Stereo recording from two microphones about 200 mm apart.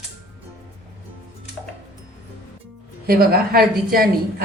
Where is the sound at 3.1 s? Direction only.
50° right (ahead or behind).